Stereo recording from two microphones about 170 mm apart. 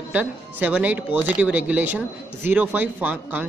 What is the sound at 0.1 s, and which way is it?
Speech, 10° right (ahead or behind).